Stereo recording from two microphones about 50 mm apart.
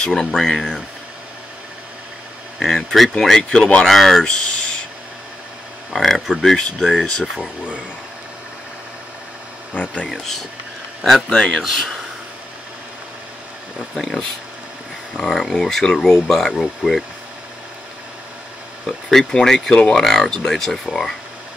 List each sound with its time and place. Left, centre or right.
0.0 s speech: centre
2.6 s speech: centre
3.4 s speech: centre
3.8 s speech: centre
5.9 s speech: centre
10.0 s speech: centre
11.4 s speech: centre
13.9 s speech: centre
18.9 s speech: centre